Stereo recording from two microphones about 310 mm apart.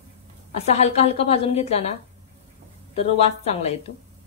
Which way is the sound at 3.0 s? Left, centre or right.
Centre.